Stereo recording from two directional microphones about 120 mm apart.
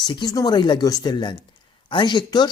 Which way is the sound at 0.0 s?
40° left (ahead or behind).